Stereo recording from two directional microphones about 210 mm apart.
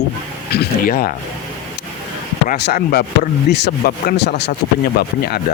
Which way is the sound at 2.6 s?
50° left (ahead or behind).